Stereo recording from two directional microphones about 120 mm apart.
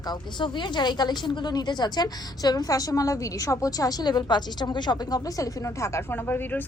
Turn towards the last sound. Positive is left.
turn(degrees=15)  # may be behind; listen again after turning